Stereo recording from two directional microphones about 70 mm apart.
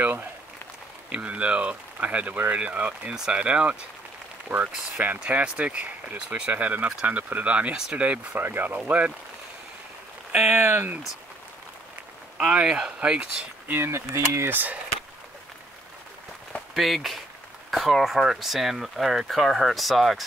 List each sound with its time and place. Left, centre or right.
1.1 s speech: centre
10.3 s speech: right
12.4 s speech: centre
13.7 s speech: right
14.5 s speech: right
16.7 s speech: centre